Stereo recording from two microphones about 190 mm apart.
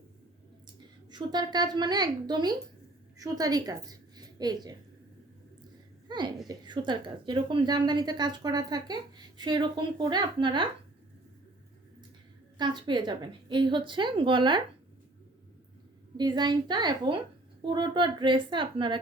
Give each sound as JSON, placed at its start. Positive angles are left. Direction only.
{"t": 1.1, "sound": "speech", "side_deg": -20}
{"t": 6.1, "sound": "speech", "side_deg": -20}
{"t": 12.5, "sound": "speech", "side_deg": -25}
{"t": 16.1, "sound": "speech", "side_deg": -20}